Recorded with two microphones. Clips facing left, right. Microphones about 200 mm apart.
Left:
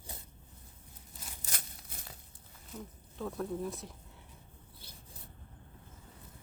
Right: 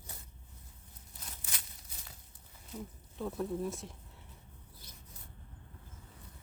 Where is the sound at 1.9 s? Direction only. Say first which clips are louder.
Left 4 dB; 60° left (ahead or behind).